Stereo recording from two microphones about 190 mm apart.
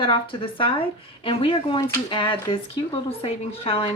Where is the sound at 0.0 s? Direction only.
25° left (ahead or behind).